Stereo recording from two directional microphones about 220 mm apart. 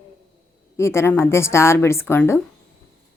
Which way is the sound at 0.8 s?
10° left (ahead or behind).